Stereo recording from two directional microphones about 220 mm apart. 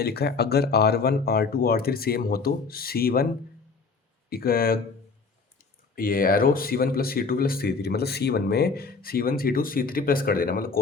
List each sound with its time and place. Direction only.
0.0 s speech: 45° left (ahead or behind)
4.3 s speech: 45° left (ahead or behind)
6.0 s speech: 40° left (ahead or behind)